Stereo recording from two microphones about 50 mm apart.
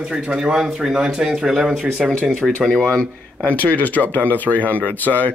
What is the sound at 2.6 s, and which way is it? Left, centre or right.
Speech, centre.